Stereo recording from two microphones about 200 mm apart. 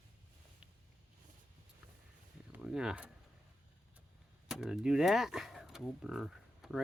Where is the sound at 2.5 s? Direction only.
5° right (ahead or behind).